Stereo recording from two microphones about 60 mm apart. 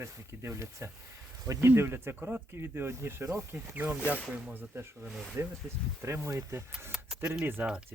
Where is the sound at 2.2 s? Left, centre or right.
Right.